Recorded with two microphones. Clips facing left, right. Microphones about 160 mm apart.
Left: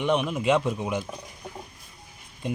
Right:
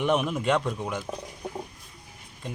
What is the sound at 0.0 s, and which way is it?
Speech, centre (ahead or behind).